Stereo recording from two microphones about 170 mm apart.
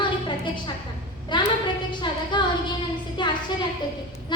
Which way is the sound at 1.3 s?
25° left (ahead or behind).